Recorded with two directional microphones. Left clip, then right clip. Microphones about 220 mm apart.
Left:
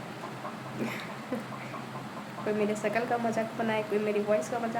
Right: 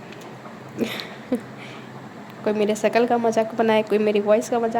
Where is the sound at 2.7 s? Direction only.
40° right (ahead or behind).